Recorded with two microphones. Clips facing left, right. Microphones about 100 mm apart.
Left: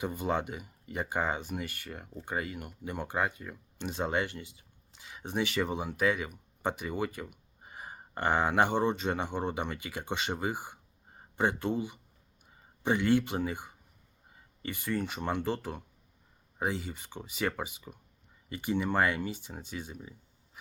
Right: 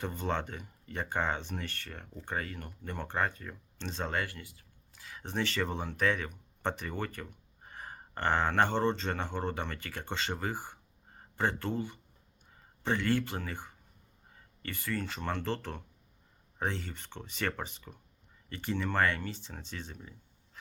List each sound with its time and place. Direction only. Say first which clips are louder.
0.0 s speech: left 3 dB; 10° left (ahead or behind)